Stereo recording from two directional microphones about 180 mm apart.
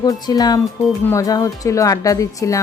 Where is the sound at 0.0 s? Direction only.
20° left (ahead or behind).